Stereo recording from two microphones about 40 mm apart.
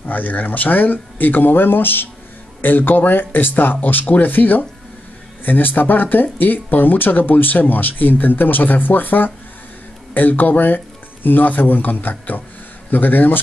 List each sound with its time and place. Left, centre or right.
0.0 s speech: left